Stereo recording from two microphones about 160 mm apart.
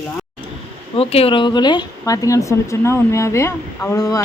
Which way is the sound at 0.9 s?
35° left (ahead or behind).